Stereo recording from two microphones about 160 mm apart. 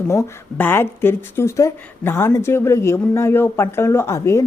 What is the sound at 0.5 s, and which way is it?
Speech, 10° left (ahead or behind).